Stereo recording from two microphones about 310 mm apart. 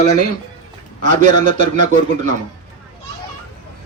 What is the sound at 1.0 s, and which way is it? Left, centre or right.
A man's voice, right.